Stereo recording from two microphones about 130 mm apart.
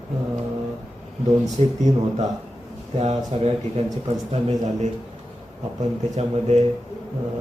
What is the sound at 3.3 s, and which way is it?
Speech, 50° right (ahead or behind).